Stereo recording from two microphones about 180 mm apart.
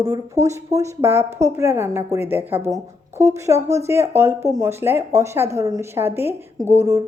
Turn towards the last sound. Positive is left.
turn(degrees=-15)  # may be behind; listen again after turning